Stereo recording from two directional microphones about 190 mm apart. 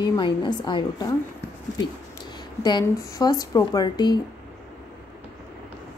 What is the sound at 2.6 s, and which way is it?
A woman's voice, 20° left (ahead or behind).